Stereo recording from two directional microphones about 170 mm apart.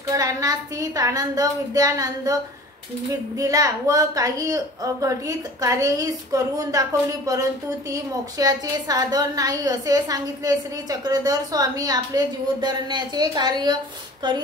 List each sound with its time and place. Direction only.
0.1 s a woman's voice: 20° right (ahead or behind)
3.3 s a woman's voice: 20° right (ahead or behind)